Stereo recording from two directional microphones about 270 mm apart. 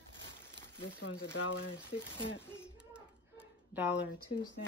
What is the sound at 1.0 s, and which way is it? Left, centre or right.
Speech, left.